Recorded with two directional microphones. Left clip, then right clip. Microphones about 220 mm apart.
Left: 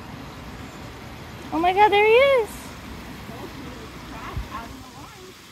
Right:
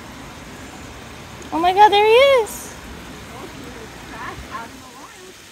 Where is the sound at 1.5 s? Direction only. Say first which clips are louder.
Right 5 dB; 20° right (ahead or behind).